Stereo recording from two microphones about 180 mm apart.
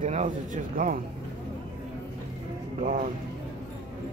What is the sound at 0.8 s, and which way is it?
Speech, 50° right (ahead or behind).